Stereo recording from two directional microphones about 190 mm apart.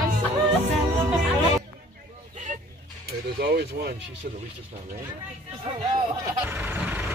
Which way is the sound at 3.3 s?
55° right (ahead or behind).